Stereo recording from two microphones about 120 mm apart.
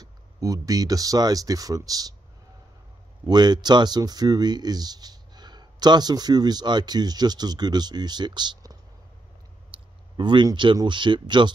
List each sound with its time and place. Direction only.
0.0 s speech: 30° right (ahead or behind)
3.3 s speech: 35° right (ahead or behind)